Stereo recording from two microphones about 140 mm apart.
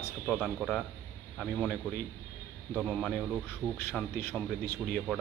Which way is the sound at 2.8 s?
10° left (ahead or behind).